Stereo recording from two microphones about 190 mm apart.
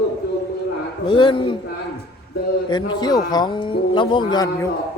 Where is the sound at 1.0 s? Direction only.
25° left (ahead or behind).